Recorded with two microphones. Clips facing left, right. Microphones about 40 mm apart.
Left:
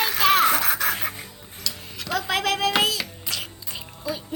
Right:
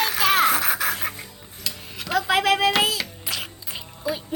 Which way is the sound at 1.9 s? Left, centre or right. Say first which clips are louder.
Right 4 dB; centre.